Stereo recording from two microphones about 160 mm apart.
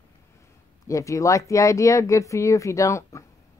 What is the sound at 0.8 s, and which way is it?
Speech, 20° left (ahead or behind).